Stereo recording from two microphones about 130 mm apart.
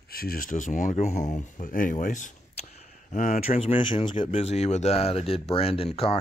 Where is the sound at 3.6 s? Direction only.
40° left (ahead or behind).